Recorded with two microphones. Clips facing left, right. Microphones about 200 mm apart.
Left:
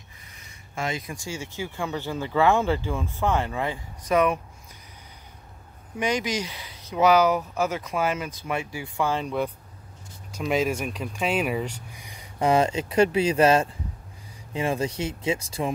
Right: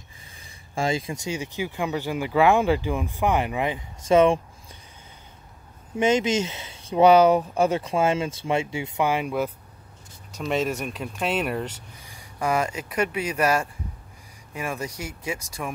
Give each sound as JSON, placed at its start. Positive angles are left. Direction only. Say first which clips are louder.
{"t": 0.7, "sound": "speech", "louder": "right 5 dB", "side_deg": -30}
{"t": 5.9, "sound": "speech", "louder": "right 5 dB", "side_deg": -25}
{"t": 12.0, "sound": "speech", "louder": "left 3 dB", "side_deg": 20}